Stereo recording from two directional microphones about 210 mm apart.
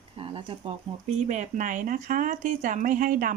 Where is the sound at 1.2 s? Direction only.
35° right (ahead or behind).